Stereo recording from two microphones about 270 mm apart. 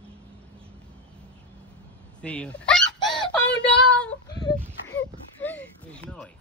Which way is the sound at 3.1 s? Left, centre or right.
Centre.